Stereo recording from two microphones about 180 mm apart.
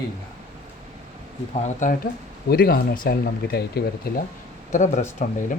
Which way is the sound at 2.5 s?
55° left (ahead or behind).